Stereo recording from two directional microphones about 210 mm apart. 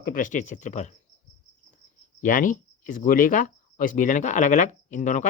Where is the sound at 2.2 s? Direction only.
40° left (ahead or behind).